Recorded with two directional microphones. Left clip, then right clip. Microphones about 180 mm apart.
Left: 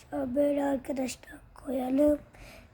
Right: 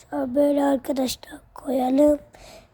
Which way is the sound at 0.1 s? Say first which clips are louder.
Right 7 dB; 25° right (ahead or behind).